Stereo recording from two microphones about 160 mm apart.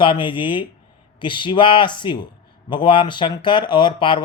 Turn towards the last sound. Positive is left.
turn(degrees=30)  # may be behind; listen again after turning